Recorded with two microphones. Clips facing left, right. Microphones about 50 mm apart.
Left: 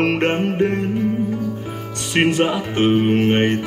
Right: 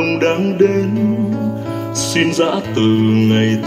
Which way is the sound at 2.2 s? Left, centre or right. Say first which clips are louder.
Right 2 dB; centre.